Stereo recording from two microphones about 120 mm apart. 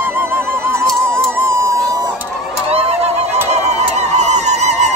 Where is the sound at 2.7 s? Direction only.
60° right (ahead or behind).